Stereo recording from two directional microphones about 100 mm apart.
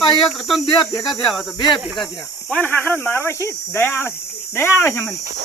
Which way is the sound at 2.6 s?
20° left (ahead or behind).